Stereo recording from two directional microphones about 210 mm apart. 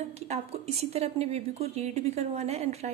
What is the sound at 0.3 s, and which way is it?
A woman's voice, 30° right (ahead or behind).